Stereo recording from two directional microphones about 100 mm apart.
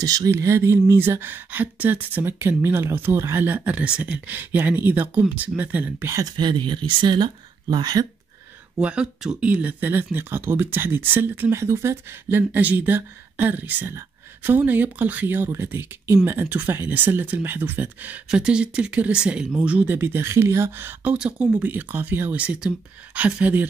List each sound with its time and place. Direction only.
0.0 s speech: 35° right (ahead or behind); by 6.1 s 20° right (ahead or behind)
6.1 s speech: 45° right (ahead or behind)
8.8 s speech: 10° right (ahead or behind); by 20.9 s 25° right (ahead or behind)
21.0 s speech: 10° right (ahead or behind)